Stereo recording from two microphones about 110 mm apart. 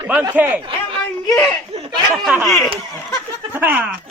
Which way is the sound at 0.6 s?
50° right (ahead or behind).